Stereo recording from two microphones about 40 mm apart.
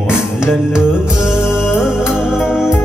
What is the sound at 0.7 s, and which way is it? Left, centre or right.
Music, centre.